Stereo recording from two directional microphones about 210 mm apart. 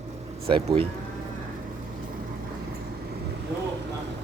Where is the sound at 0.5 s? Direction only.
25° right (ahead or behind).